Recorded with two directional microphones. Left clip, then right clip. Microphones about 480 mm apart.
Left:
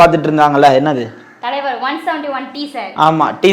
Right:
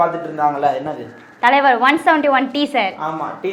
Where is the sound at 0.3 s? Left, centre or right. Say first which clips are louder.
Left 7 dB; left.